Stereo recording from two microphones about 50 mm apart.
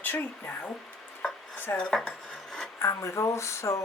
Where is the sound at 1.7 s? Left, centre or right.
Left.